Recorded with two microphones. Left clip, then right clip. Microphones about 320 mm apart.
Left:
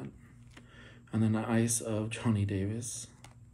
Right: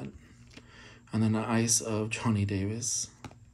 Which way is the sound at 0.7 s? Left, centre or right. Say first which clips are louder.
Right 2 dB; centre.